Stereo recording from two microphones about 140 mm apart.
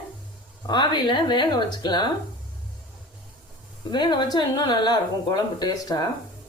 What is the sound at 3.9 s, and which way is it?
Speech, 30° left (ahead or behind).